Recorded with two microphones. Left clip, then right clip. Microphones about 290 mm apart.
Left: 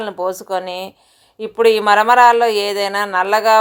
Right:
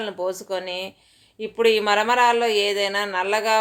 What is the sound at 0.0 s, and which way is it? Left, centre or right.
Speech, centre.